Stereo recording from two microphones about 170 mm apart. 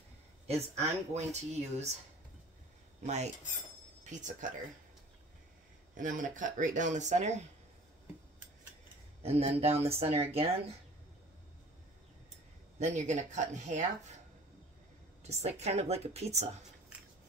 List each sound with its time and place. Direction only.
0.5 s speech: 40° right (ahead or behind)
3.0 s cutlery: 40° right (ahead or behind)
4.0 s speech: 45° right (ahead or behind)
5.9 s speech: 50° right (ahead or behind)
9.2 s speech: 40° right (ahead or behind)
12.7 s speech: 45° right (ahead or behind)
15.2 s speech: 40° right (ahead or behind)